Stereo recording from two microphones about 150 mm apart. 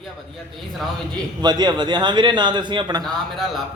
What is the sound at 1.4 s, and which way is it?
A man's voice, 30° right (ahead or behind).